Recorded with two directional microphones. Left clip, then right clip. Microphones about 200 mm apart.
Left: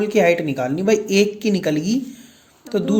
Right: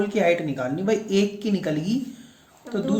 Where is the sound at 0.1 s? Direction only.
40° left (ahead or behind).